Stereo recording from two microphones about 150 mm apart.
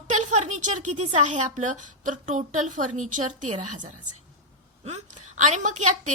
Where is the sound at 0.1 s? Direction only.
50° right (ahead or behind).